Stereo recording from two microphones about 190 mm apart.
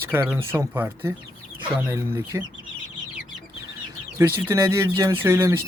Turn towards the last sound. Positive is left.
turn(degrees=-15)  # may be behind; listen again after turning